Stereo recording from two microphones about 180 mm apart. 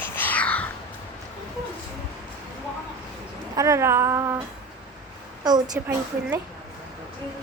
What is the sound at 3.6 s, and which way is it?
Female singing, 15° right (ahead or behind).